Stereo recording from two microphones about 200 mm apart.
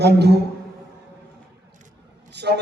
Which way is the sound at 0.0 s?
55° right (ahead or behind).